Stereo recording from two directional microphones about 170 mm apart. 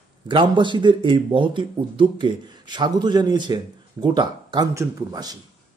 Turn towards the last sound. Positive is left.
turn(degrees=-20)  # may be behind; listen again after turning